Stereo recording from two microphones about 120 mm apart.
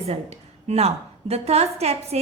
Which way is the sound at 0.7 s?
60° right (ahead or behind).